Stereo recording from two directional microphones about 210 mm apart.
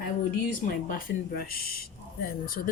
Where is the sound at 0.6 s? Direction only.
45° left (ahead or behind).